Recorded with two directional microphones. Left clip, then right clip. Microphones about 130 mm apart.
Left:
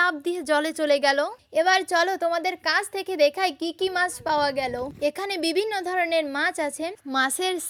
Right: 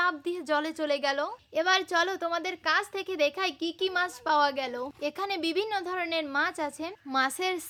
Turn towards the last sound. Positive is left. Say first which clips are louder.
# left 4 dB
turn(degrees=40)  # may be behind; listen again after turning